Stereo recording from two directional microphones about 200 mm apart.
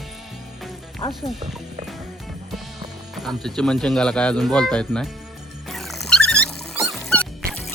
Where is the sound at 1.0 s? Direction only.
25° left (ahead or behind).